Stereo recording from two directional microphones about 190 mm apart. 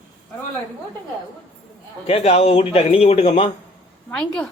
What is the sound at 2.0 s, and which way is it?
A man's voice, 35° left (ahead or behind).